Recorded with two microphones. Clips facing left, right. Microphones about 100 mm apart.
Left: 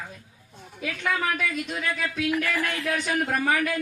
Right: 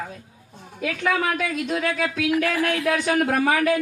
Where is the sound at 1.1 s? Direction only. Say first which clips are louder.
Right 3 dB; 65° right (ahead or behind).